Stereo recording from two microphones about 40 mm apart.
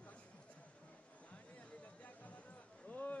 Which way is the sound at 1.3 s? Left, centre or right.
Left.